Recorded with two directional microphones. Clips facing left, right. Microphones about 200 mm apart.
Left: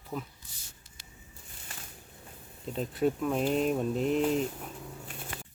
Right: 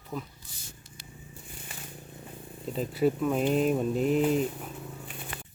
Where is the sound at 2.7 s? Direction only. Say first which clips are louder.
Right 2 dB; centre (ahead or behind).